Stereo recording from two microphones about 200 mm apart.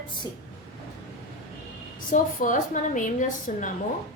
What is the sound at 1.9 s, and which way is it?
A woman's voice, 40° left (ahead or behind).